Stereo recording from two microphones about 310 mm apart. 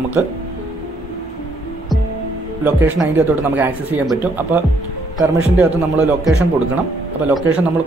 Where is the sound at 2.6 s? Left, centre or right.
Centre.